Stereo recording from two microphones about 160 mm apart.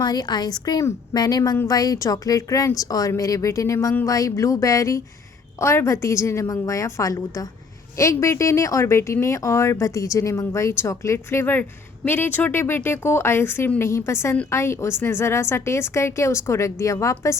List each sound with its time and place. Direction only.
0.0 s a woman's voice: 25° left (ahead or behind)